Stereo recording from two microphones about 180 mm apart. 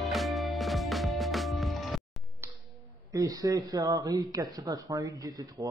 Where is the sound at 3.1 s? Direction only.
20° right (ahead or behind).